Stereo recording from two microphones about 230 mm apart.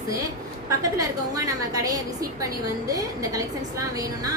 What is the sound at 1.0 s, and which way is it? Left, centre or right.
A woman's voice, centre.